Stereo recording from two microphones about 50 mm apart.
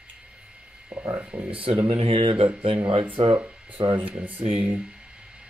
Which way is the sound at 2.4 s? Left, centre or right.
Right.